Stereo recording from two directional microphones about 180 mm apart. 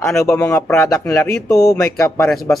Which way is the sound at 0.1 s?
15° left (ahead or behind).